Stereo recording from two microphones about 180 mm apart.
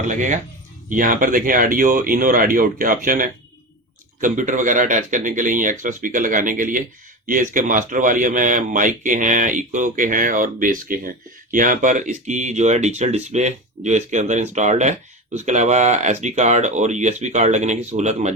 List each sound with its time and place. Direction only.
0.1 s speech: 45° right (ahead or behind)